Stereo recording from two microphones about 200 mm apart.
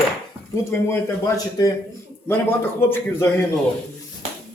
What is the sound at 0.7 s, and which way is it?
Speech, 15° left (ahead or behind).